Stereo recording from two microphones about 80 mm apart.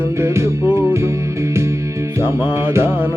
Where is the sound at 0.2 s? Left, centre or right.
Right.